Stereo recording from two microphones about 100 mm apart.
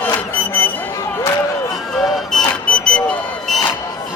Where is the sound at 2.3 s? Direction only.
5° left (ahead or behind).